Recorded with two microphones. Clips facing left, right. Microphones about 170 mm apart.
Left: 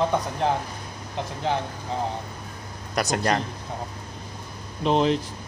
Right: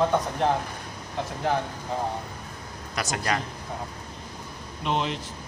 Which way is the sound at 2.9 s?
40° left (ahead or behind).